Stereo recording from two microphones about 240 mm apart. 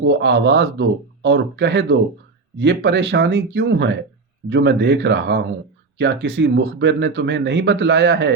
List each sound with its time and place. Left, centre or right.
0.1 s speech: right